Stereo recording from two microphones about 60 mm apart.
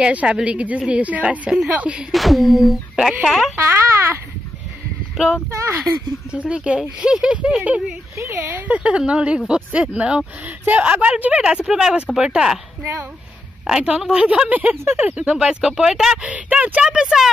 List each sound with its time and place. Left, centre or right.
0.0 s a woman's voice: centre
2.1 s a sound: centre
3.5 s a child's voice: right
5.1 s speech: centre
5.5 s speech: right
5.8 s a woman's voice: right; by 7.6 s centre
8.2 s speech: right
8.6 s a woman's voice: right
13.7 s speech: centre
14.5 s a woman's voice: right; by 16.2 s centre
16.2 s a woman's voice: right
16.8 s speech: centre